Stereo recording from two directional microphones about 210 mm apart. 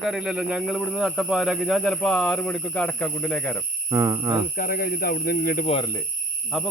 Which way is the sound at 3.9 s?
15° right (ahead or behind).